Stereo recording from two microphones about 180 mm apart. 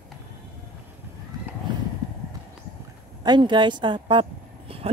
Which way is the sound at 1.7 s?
25° right (ahead or behind).